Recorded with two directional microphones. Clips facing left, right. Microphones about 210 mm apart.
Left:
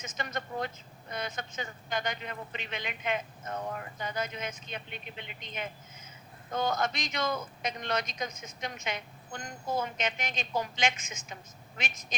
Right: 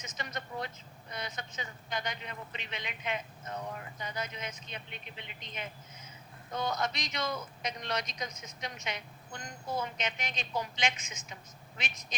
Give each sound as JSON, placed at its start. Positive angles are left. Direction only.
{"t": 0.0, "sound": "a man's voice", "side_deg": 50}